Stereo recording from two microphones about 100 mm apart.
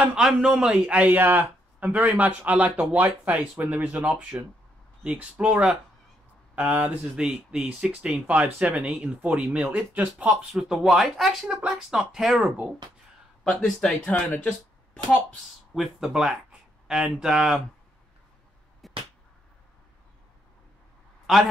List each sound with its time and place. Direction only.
0.0 s a man's voice: 5° right (ahead or behind)
13.4 s speech: 10° left (ahead or behind)
15.7 s a man's voice: centre (ahead or behind)
18.8 s a sound: centre (ahead or behind)